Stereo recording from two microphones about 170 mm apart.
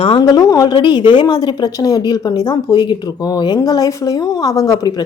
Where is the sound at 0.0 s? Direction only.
30° left (ahead or behind).